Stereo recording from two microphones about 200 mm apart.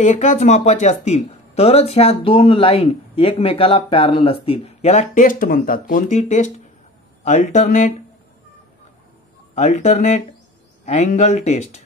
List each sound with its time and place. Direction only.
0.0 s speech: 35° left (ahead or behind)
9.6 s speech: 35° left (ahead or behind)